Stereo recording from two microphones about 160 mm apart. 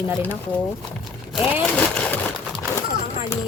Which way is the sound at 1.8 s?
5° left (ahead or behind).